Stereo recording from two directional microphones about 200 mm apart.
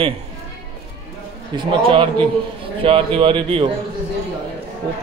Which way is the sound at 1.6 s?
25° right (ahead or behind).